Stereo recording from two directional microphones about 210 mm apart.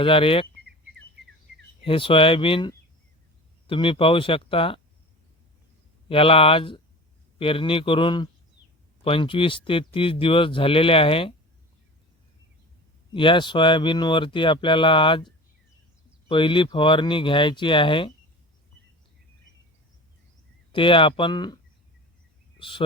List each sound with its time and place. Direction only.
0.0 s speech: 25° left (ahead or behind)
1.8 s speech: 25° left (ahead or behind)
6.1 s speech: 25° left (ahead or behind)
13.1 s speech: 20° left (ahead or behind)
16.3 s speech: 25° left (ahead or behind)
20.7 s speech: 25° left (ahead or behind)